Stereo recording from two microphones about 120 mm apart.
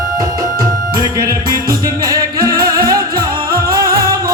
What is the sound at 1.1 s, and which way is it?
Music, 30° right (ahead or behind).